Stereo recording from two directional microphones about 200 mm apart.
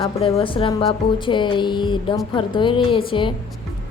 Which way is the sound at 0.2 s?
30° left (ahead or behind).